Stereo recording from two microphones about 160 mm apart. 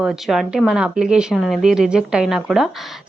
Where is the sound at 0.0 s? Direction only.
Centre (ahead or behind).